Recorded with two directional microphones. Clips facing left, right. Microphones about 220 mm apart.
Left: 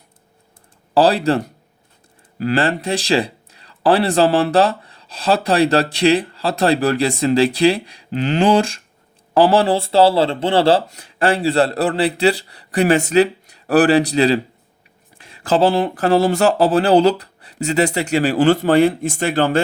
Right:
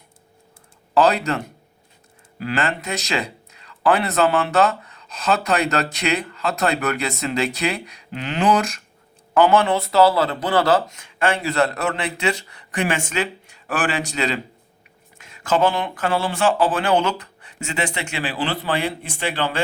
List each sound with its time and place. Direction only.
0.9 s speech: 30° left (ahead or behind)